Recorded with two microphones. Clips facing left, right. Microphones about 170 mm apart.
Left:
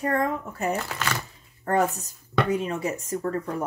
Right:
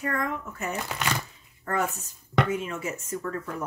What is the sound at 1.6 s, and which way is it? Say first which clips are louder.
Speech: left 5 dB; 35° left (ahead or behind).